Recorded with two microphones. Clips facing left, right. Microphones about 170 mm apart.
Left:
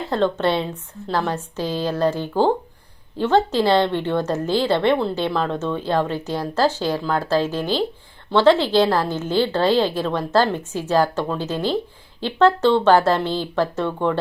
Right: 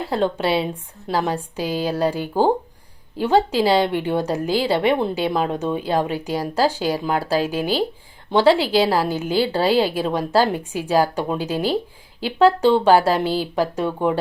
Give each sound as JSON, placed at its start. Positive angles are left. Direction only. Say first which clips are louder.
{"t": 0.1, "sound": "a woman's voice", "louder": "left 1 dB", "side_deg": -10}